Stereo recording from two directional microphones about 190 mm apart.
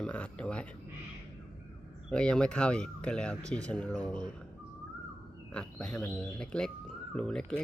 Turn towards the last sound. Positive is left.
turn(degrees=5)  # may be behind; listen again after turning